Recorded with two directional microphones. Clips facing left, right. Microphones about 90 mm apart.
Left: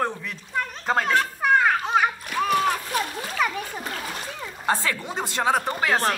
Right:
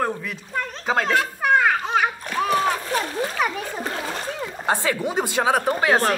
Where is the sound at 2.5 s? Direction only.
35° right (ahead or behind).